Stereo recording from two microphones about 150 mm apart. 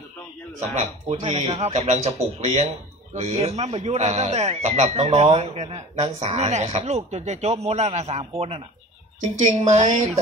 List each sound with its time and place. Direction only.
0.7 s speech: 50° right (ahead or behind)
9.4 s speech: 55° right (ahead or behind)